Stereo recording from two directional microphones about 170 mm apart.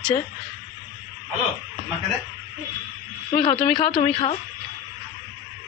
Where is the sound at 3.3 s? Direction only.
30° left (ahead or behind).